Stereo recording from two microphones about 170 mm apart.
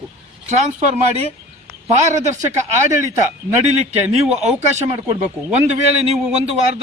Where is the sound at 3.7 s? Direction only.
40° right (ahead or behind).